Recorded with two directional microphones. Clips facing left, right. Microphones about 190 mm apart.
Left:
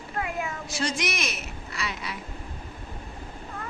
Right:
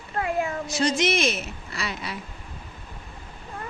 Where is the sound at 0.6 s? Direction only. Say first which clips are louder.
Right 6 dB; 20° right (ahead or behind).